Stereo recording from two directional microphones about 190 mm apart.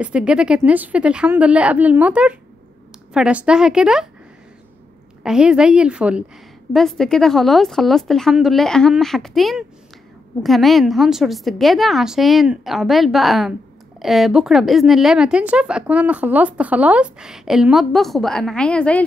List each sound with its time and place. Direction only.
0.0 s a woman's voice: 5° right (ahead or behind)
5.2 s a woman's voice: 5° right (ahead or behind)